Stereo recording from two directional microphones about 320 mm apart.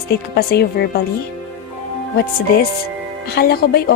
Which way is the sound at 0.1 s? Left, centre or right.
Left.